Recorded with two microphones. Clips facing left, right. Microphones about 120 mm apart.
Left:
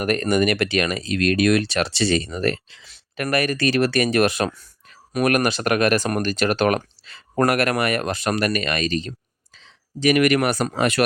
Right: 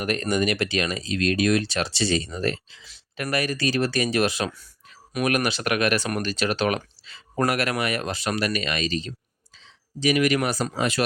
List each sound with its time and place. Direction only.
0.0 s speech: 55° left (ahead or behind)